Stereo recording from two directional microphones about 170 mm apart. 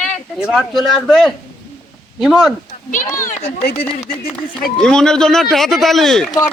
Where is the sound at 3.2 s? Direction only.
45° left (ahead or behind).